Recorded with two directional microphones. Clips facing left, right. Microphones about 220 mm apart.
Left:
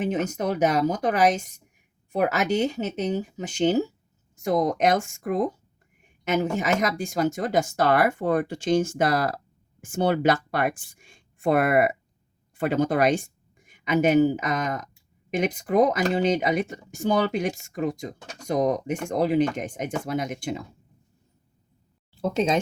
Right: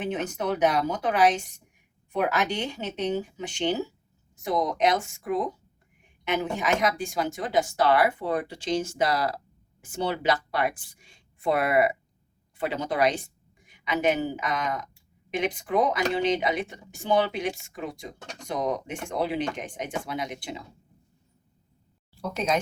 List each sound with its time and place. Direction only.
0.0 s speech: 40° left (ahead or behind)
22.2 s speech: 25° left (ahead or behind)